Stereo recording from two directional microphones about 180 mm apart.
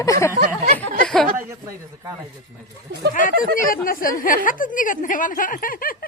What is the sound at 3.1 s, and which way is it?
Speech, 50° left (ahead or behind).